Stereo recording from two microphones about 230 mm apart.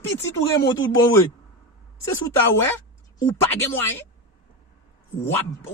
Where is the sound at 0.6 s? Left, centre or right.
Centre.